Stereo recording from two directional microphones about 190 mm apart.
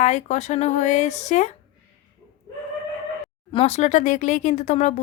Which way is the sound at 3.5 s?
30° left (ahead or behind).